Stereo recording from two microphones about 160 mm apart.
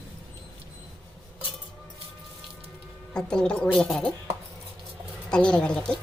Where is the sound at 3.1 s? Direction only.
5° left (ahead or behind).